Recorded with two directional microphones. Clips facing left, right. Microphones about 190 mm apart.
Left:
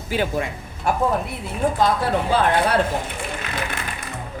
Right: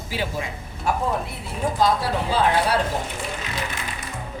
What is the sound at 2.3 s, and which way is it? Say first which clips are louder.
Speech: even; 55° left (ahead or behind).